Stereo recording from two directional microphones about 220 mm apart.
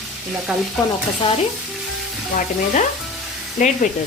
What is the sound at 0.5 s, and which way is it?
Sizzle, 5° right (ahead or behind).